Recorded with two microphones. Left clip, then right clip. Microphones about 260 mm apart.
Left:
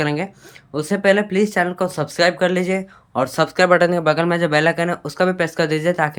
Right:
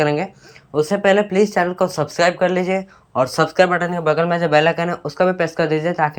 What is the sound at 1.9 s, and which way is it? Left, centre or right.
Speech, left.